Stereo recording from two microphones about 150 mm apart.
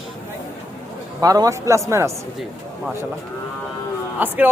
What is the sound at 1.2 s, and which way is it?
Speech, 25° right (ahead or behind).